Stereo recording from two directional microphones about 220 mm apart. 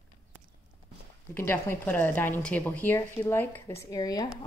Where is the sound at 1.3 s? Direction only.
10° left (ahead or behind).